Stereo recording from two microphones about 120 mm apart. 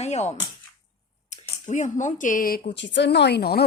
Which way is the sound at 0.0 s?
70° left (ahead or behind).